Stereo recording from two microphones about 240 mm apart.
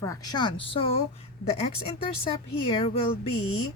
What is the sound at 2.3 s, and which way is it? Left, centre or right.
Speech, left.